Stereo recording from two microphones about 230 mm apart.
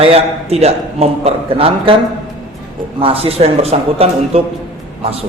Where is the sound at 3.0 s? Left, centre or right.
Right.